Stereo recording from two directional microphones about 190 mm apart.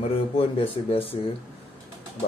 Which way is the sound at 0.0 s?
30° left (ahead or behind).